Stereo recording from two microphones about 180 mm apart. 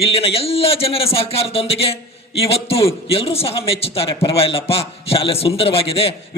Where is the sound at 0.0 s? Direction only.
30° left (ahead or behind).